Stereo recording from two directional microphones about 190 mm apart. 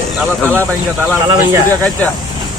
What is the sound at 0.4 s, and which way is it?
Speech, 10° right (ahead or behind).